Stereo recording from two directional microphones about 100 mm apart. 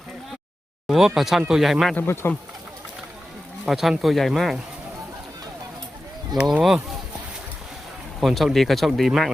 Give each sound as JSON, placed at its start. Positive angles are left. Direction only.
{"t": 0.9, "sound": "speech", "side_deg": -5}
{"t": 2.0, "sound": "speech", "side_deg": 20}
{"t": 3.7, "sound": "speech", "side_deg": 0}
{"t": 6.6, "sound": "speech", "side_deg": -5}
{"t": 8.2, "sound": "speech", "side_deg": 0}